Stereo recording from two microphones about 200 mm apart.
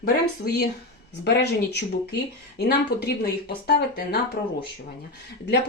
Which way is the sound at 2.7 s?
55° left (ahead or behind).